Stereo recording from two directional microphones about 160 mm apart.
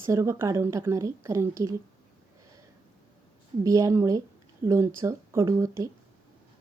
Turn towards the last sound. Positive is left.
turn(degrees=-20)  # may be behind; listen again after turning